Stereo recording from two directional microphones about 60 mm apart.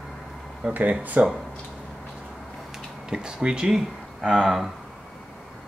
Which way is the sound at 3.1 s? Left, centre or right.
Centre.